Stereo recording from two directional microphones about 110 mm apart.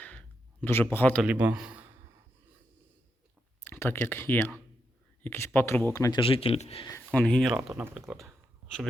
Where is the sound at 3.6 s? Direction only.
20° left (ahead or behind).